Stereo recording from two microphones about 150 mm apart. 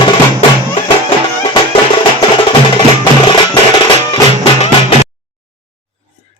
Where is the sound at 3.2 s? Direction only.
30° left (ahead or behind).